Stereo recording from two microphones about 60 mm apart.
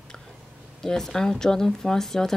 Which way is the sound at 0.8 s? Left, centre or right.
Centre.